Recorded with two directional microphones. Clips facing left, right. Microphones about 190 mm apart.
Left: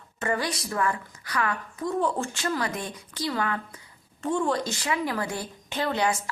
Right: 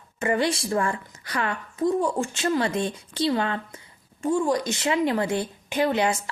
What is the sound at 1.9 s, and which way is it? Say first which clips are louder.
A woman's voice: right 2 dB; 15° right (ahead or behind).